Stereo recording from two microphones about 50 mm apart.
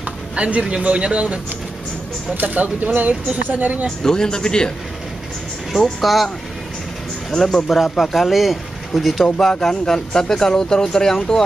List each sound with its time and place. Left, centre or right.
0.4 s speech: right
4.0 s speech: centre
5.9 s speech: centre
9.5 s speech: centre